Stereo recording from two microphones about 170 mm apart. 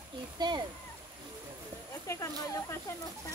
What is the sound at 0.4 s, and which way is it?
Speech, 25° right (ahead or behind).